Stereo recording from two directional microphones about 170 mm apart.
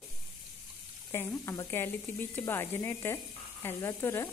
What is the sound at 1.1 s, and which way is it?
Sizzle, 15° left (ahead or behind).